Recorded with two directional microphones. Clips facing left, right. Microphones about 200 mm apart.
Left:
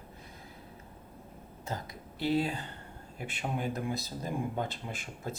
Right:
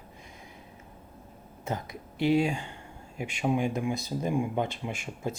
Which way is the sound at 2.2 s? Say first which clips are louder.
Right 5 dB; 15° right (ahead or behind).